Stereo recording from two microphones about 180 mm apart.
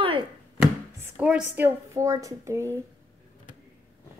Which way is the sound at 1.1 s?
5° right (ahead or behind).